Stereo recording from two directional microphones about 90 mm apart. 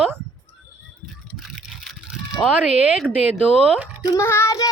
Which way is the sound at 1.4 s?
5° right (ahead or behind).